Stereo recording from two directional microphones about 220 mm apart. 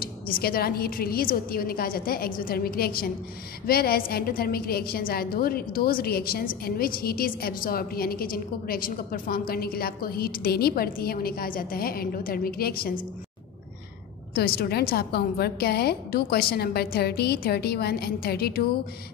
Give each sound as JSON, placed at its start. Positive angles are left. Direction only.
{"t": 0.0, "sound": "a woman's voice", "side_deg": 45}
{"t": 14.3, "sound": "a woman's voice", "side_deg": 45}